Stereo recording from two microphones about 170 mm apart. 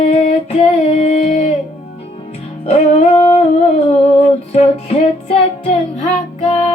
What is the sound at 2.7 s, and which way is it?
Music, 30° left (ahead or behind).